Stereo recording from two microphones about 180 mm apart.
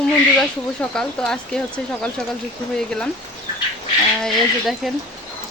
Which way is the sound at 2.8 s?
5° left (ahead or behind).